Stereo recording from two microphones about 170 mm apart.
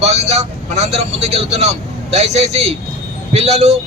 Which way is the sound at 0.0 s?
40° right (ahead or behind).